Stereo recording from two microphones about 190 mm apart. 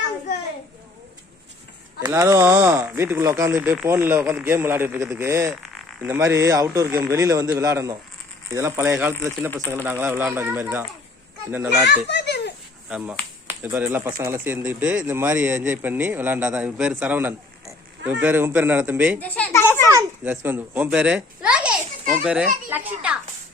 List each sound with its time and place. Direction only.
2.0 s speech: 20° right (ahead or behind)
5.6 s insect: centre (ahead or behind)
6.1 s speech: 15° right (ahead or behind)
11.9 s a sound: 65° left (ahead or behind)
13.5 s speech: 10° right (ahead or behind)
19.2 s a sound: 10° left (ahead or behind)
20.0 s a child's voice: 10° right (ahead or behind)